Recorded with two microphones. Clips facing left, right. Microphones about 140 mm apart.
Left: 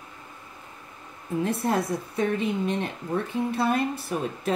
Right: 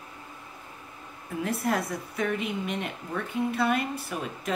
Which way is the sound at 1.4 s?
30° left (ahead or behind).